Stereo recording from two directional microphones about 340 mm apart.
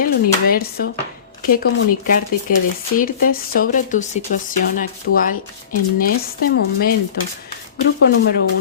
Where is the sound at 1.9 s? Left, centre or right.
Left.